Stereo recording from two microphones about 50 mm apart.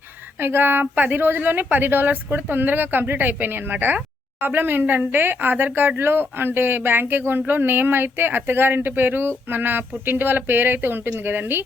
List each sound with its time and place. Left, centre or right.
0.3 s a woman's voice: right